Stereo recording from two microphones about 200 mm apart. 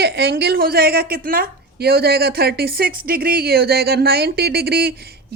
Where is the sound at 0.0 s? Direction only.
55° right (ahead or behind).